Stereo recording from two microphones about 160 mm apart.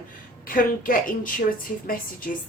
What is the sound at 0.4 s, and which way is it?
A woman's voice, 60° left (ahead or behind).